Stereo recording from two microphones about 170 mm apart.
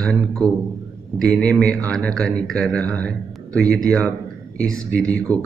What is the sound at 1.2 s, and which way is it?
Speech, 5° left (ahead or behind).